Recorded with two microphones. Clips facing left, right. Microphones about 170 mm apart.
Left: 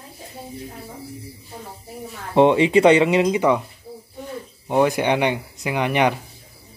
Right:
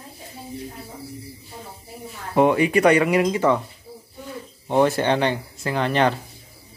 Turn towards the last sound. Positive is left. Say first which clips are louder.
# left 1 dB
turn(degrees=15)  # may be behind; listen again after turning